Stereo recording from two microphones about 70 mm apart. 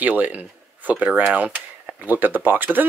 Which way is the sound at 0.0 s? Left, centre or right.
Right.